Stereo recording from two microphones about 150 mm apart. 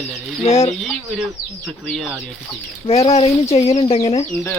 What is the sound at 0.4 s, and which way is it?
Speech, 45° left (ahead or behind).